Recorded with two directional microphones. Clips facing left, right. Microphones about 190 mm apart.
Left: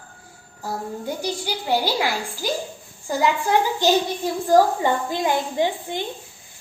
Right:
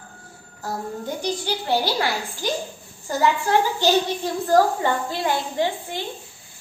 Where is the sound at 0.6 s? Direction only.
10° left (ahead or behind).